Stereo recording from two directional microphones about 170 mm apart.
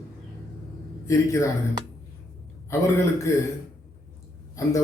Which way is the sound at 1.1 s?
20° left (ahead or behind).